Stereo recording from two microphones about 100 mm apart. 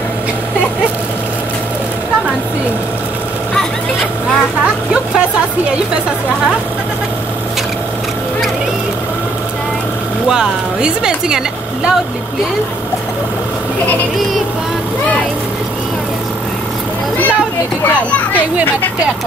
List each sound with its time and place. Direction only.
10.2 s speech: 5° right (ahead or behind)
17.8 s a child's voice: 20° left (ahead or behind)